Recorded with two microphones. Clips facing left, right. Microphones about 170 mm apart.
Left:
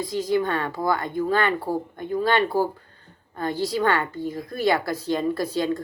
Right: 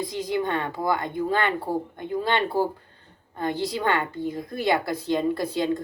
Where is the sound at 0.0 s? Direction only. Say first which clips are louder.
Left 3 dB; 20° right (ahead or behind).